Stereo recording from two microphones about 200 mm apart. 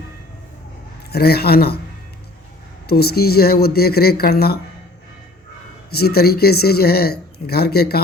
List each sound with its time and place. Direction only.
1.1 s speech: 50° left (ahead or behind)
2.8 s speech: 50° left (ahead or behind)
5.9 s speech: 50° left (ahead or behind)